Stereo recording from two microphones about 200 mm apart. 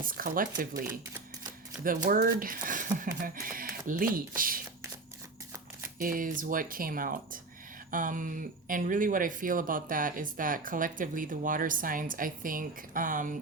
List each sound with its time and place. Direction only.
0.0 s speech: 45° right (ahead or behind)
2.0 s speech: 45° right (ahead or behind)
6.0 s speech: 45° right (ahead or behind)